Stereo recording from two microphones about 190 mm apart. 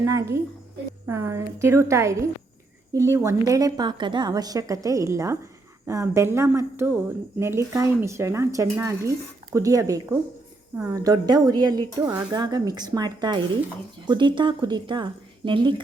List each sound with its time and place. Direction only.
0.0 s speech: 15° right (ahead or behind)